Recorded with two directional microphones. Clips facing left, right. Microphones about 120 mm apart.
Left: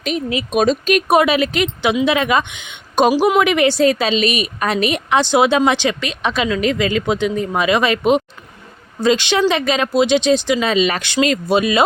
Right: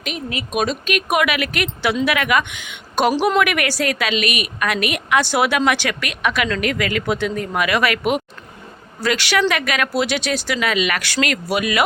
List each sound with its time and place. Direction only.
0.3 s a woman's voice: 35° left (ahead or behind)